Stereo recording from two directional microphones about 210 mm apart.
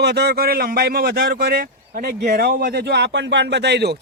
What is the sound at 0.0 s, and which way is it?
A man's voice, 50° right (ahead or behind).